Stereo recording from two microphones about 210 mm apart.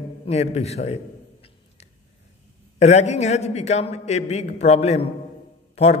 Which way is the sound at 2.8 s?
30° left (ahead or behind).